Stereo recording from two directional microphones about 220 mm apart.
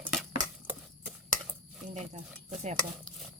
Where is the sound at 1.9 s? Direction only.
30° right (ahead or behind).